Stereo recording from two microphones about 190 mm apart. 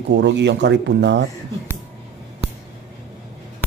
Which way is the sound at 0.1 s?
65° right (ahead or behind).